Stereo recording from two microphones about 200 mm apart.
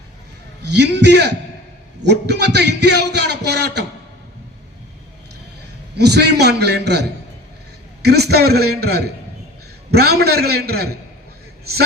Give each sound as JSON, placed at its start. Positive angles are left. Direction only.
{"t": 0.7, "sound": "a man's voice", "side_deg": -55}
{"t": 6.0, "sound": "a man's voice", "side_deg": -55}
{"t": 8.0, "sound": "a man's voice", "side_deg": -55}